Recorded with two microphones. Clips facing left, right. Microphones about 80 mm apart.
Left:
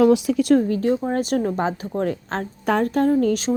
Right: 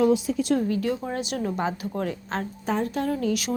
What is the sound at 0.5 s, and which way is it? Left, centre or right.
Speech, left.